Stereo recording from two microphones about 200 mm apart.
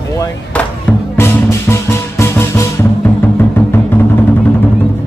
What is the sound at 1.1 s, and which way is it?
Music, 10° left (ahead or behind).